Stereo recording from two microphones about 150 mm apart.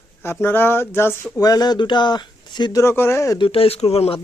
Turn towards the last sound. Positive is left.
turn(degrees=40)  # may be behind; listen again after turning